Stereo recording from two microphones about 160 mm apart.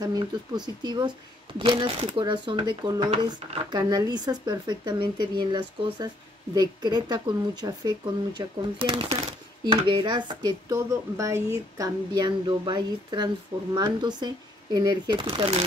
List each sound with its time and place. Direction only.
0.0 s speech: 25° right (ahead or behind)